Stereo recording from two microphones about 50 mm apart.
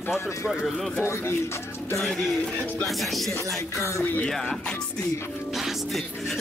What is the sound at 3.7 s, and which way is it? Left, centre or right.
Speech, left.